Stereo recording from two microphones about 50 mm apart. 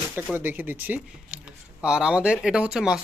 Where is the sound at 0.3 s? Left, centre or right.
Right.